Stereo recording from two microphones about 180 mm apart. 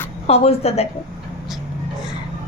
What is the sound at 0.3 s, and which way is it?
Speech, 35° left (ahead or behind).